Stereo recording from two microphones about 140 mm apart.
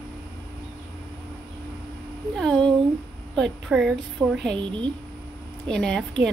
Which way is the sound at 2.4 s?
5° left (ahead or behind).